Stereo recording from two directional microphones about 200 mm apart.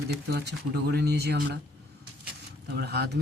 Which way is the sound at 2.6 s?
55° right (ahead or behind).